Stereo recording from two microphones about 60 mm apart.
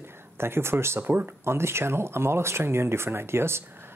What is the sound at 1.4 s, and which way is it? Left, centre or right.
Speech, right.